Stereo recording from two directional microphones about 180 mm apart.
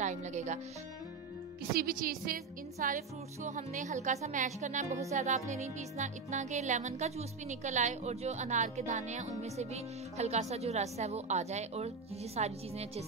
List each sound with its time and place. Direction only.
0.0 s speech: 40° right (ahead or behind)
1.7 s a woman's voice: 55° right (ahead or behind)
5.1 s music: 40° right (ahead or behind)